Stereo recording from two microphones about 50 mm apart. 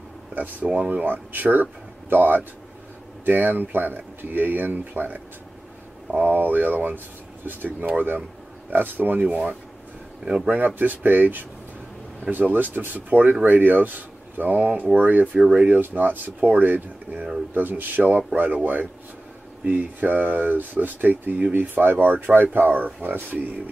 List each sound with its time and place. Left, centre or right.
0.3 s speech: right
10.2 s speech: centre
10.6 s speech: right
15.3 s speech: centre
15.8 s speech: right